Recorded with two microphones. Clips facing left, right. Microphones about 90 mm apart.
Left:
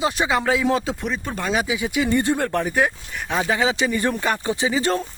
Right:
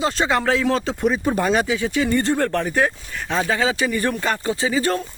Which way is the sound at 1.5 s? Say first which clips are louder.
Right 3 dB; 10° left (ahead or behind).